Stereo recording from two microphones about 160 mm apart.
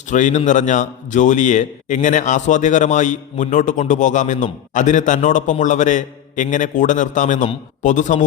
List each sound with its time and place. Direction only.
0.1 s a man's voice: 50° left (ahead or behind)